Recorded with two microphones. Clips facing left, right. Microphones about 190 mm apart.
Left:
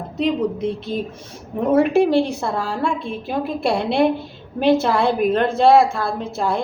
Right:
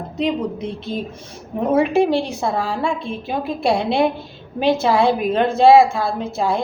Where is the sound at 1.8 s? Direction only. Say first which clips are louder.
Left 2 dB; centre (ahead or behind).